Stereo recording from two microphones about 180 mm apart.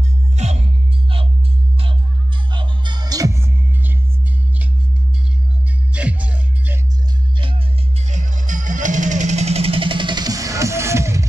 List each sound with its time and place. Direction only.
0.4 s music: 40° right (ahead or behind)
2.5 s music: 25° right (ahead or behind)
5.9 s music: 5° right (ahead or behind)
7.3 s music: 30° right (ahead or behind)
8.1 s music: 45° right (ahead or behind); by 11.2 s 15° right (ahead or behind)